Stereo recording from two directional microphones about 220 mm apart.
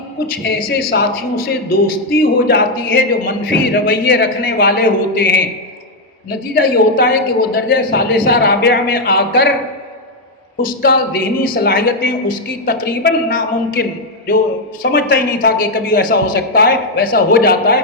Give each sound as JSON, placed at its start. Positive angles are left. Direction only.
{"t": 0.4, "sound": "a woman's voice", "side_deg": 45}
{"t": 6.5, "sound": "a woman's voice", "side_deg": 45}
{"t": 10.6, "sound": "a woman's voice", "side_deg": 40}